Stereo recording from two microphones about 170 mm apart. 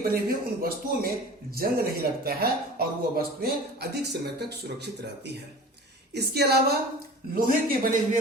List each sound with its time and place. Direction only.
0.0 s speech: 60° right (ahead or behind)
6.1 s speech: 70° right (ahead or behind)
7.3 s speech: 55° right (ahead or behind)